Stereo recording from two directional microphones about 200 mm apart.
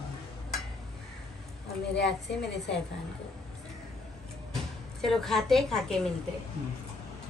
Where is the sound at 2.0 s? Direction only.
60° left (ahead or behind).